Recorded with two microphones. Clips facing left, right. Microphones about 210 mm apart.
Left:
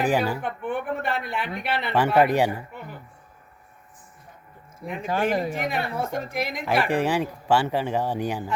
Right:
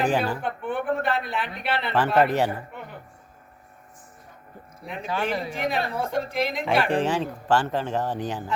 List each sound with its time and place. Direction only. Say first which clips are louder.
0.0 s speech: left 1 dB; 10° left (ahead or behind)
4.9 s speech: left 3 dB; 50° left (ahead or behind)
5.5 s speech: right 1 dB; 10° left (ahead or behind)